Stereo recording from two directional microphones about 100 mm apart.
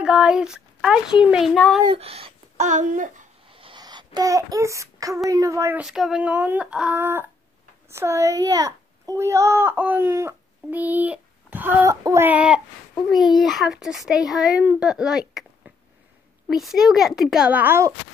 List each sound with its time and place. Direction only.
0.0 s speech: 5° right (ahead or behind)
1.5 s a child's voice: 5° left (ahead or behind)
2.0 s a sound: 75° right (ahead or behind)
3.5 s a sound: 60° right (ahead or behind)
3.8 s a sound: 45° right (ahead or behind)
5.3 s speech: 30° right (ahead or behind)
5.8 s speech: 5° right (ahead or behind)
7.0 s a child's voice: 25° right (ahead or behind)
11.8 s child singing: 35° right (ahead or behind)
12.3 s speech: 10° right (ahead or behind)
13.1 s a child's voice: centre (ahead or behind)
17.5 s speech: 20° right (ahead or behind)